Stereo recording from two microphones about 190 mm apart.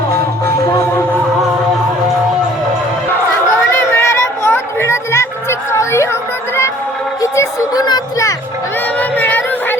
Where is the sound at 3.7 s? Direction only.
15° left (ahead or behind).